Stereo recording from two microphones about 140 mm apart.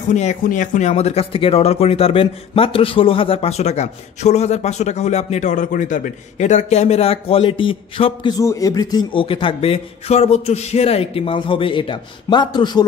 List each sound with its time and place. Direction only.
0.1 s speech: 55° left (ahead or behind)
0.4 s speech: 65° left (ahead or behind); by 9.0 s 25° left (ahead or behind)
9.1 s speech: 40° left (ahead or behind)